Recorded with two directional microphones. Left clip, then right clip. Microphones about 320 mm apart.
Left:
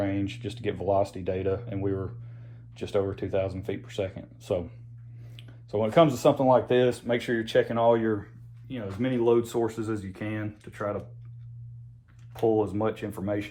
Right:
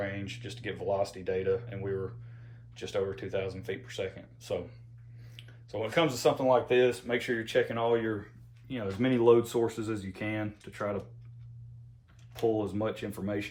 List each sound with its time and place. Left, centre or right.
0.0 s speech: centre
8.6 s speech: centre
12.3 s speech: centre